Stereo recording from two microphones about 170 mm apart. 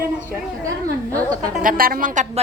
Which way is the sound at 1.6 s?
55° right (ahead or behind).